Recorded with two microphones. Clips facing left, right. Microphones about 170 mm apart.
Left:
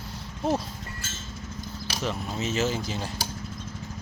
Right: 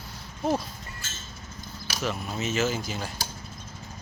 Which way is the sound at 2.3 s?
35° left (ahead or behind).